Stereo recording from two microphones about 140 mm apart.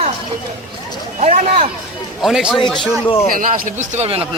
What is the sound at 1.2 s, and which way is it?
Speech, 50° right (ahead or behind).